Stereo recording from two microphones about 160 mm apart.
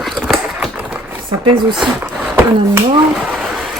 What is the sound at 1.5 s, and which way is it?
Speech, 30° right (ahead or behind).